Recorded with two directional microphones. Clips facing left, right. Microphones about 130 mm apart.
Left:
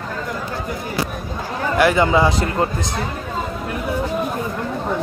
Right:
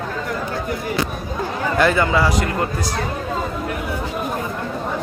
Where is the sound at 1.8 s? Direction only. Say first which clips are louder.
Left 2 dB; 15° left (ahead or behind).